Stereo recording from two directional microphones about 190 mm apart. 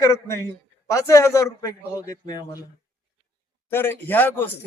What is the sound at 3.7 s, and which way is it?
Speech, 10° left (ahead or behind).